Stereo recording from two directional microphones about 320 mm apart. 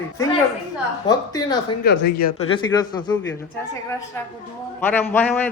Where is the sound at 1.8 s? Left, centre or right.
Left.